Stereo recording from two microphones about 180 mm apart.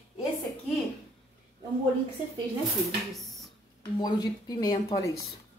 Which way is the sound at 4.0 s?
20° left (ahead or behind).